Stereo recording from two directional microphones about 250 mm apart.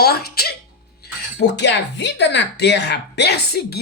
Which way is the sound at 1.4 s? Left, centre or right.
Left.